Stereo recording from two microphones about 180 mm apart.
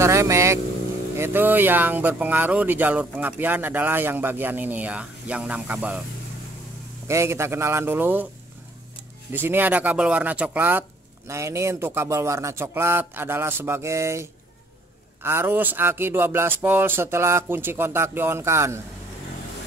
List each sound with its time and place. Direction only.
0.0 s vehicle: 15° right (ahead or behind)
1.1 s speech: 15° right (ahead or behind)
7.1 s speech: 15° right (ahead or behind)
9.3 s speech: 10° right (ahead or behind)
15.2 s speech: 15° right (ahead or behind)